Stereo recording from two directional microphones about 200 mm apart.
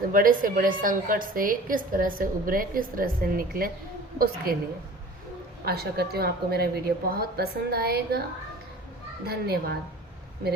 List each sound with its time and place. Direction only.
0.1 s a woman's voice: 45° right (ahead or behind)
5.6 s a woman's voice: 50° right (ahead or behind)
9.2 s a woman's voice: 50° right (ahead or behind)